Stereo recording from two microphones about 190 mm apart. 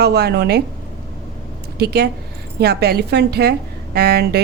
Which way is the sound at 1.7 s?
60° right (ahead or behind).